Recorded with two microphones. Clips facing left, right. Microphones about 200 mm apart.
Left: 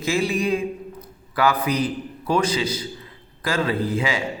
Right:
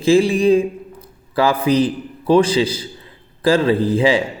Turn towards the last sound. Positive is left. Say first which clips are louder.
# right 8 dB
turn(degrees=-30)  # may be behind; listen again after turning